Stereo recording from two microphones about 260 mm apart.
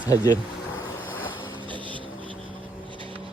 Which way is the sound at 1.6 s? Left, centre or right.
Centre.